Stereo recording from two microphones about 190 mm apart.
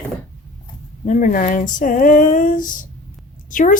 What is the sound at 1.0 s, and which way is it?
Speech, 40° left (ahead or behind).